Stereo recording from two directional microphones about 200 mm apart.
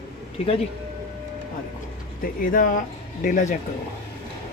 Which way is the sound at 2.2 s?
45° left (ahead or behind).